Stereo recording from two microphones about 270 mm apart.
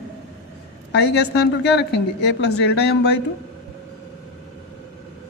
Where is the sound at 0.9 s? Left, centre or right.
Left.